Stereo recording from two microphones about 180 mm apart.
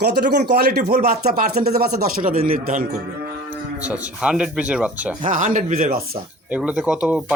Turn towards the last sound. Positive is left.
turn(degrees=-5)  # may be behind; listen again after turning